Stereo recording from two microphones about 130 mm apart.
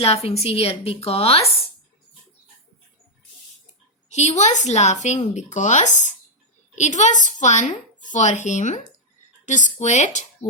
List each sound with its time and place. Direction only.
0.0 s a woman's voice: 50° left (ahead or behind)
4.1 s a woman's voice: 60° left (ahead or behind)